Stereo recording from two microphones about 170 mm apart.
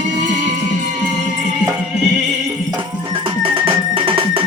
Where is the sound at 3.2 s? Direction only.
30° right (ahead or behind).